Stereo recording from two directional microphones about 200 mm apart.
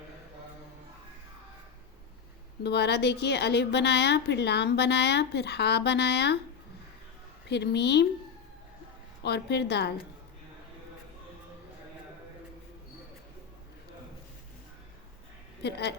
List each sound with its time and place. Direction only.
2.6 s a woman's voice: 55° left (ahead or behind)
7.4 s a woman's voice: 55° left (ahead or behind)
9.2 s a woman's voice: 55° left (ahead or behind)
15.6 s a woman's voice: 55° left (ahead or behind)